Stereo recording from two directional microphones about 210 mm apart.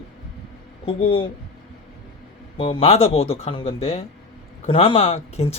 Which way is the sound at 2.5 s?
25° left (ahead or behind).